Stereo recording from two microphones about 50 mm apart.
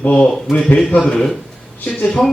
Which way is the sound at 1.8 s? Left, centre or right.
Left.